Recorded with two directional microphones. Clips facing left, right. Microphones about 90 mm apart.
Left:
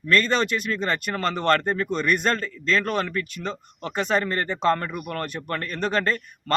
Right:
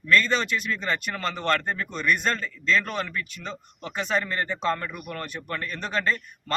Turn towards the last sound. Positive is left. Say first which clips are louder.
# left 3 dB
turn(degrees=50)  # may be behind; listen again after turning